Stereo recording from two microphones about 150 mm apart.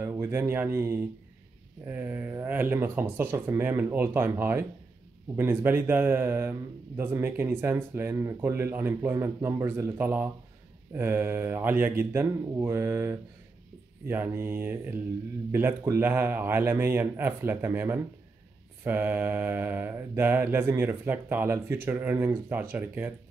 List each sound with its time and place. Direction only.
0.0 s mantra: 15° right (ahead or behind)